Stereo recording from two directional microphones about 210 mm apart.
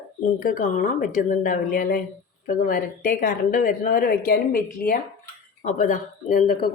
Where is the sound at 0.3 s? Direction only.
40° left (ahead or behind).